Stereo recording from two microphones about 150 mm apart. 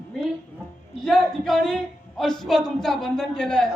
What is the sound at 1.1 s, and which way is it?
Speech, 5° left (ahead or behind).